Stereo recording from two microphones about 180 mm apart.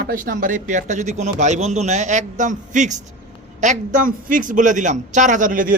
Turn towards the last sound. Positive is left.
turn(degrees=-50)  # may be behind; listen again after turning